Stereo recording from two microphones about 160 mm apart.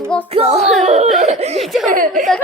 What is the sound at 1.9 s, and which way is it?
Speech, 60° right (ahead or behind).